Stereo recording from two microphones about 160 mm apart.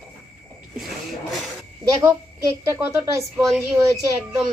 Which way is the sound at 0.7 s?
Centre (ahead or behind).